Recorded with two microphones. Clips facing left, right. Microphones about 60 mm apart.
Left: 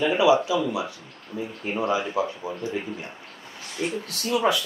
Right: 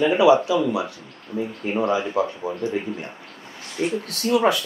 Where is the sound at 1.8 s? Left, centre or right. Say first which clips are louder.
Right 3 dB; right.